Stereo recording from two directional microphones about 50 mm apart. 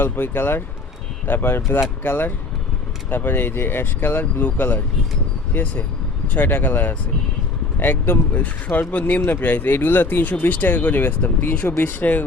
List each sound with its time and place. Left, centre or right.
0.0 s speech: left
8.3 s speech: left